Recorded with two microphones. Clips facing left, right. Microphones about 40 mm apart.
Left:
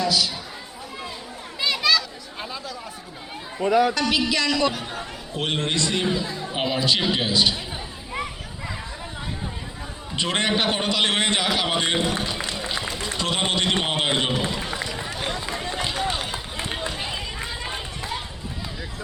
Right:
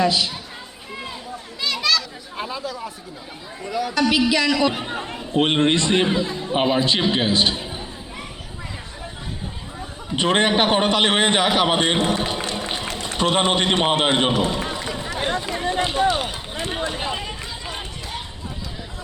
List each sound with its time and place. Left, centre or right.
0.0 s a man's voice: right
1.6 s chatter: centre
2.4 s speech: centre
3.6 s a man's voice: left
3.9 s speech: centre
4.7 s a man's voice: right
6.5 s a man's voice: right
10.2 s a man's voice: right
12.2 s run: right
12.9 s a sound: right
13.2 s a man's voice: right
14.4 s run: centre
15.1 s run: right